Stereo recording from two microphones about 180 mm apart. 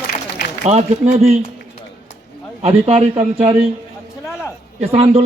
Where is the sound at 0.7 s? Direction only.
40° right (ahead or behind).